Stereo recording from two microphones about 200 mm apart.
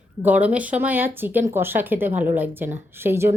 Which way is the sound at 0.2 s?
10° right (ahead or behind).